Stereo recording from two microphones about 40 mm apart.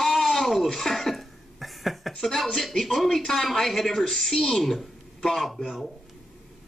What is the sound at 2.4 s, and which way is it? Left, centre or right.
A man's voice, centre.